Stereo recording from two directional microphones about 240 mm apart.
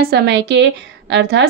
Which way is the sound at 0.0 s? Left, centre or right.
Right.